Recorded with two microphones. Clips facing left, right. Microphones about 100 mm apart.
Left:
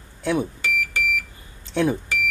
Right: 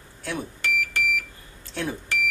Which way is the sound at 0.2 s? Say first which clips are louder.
Left 9 dB; 20° left (ahead or behind).